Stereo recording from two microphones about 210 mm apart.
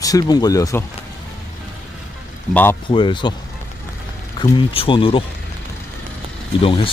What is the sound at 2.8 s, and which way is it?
Speech, 25° left (ahead or behind).